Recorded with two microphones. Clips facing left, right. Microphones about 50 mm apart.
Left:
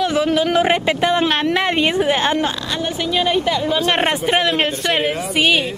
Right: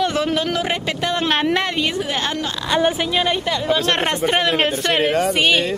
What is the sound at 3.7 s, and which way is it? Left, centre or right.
Speech, centre.